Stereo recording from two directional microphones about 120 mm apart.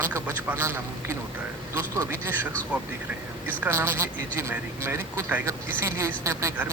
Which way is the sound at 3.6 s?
20° right (ahead or behind).